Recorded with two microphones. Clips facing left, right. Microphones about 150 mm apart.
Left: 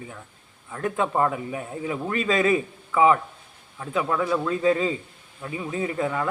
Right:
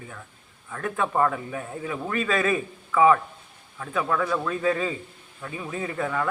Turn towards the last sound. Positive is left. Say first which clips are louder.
# left 2 dB
turn(degrees=15)  # may be behind; listen again after turning